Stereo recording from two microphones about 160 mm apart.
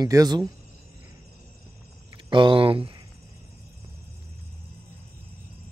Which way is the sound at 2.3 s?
30° right (ahead or behind).